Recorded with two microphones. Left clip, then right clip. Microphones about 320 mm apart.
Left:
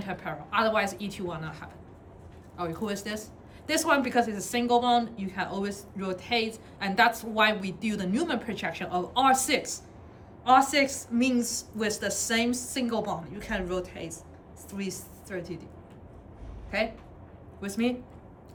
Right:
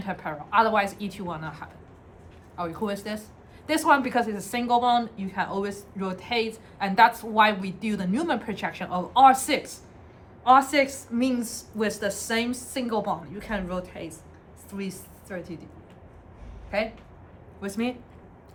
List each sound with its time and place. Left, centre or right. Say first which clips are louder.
0.0 s a woman's voice: right 3 dB; centre
16.7 s a woman's voice: right 2 dB; centre